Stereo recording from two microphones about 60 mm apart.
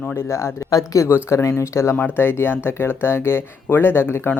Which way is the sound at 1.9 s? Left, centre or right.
Left.